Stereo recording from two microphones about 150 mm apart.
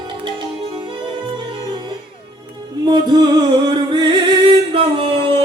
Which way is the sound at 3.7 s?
30° right (ahead or behind).